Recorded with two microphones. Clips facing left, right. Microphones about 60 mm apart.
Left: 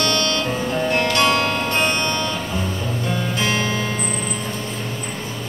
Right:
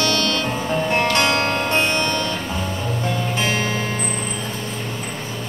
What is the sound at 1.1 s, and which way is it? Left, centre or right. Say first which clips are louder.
Music: left 1 dB; right.